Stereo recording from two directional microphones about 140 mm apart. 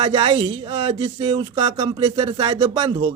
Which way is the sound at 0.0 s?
40° right (ahead or behind).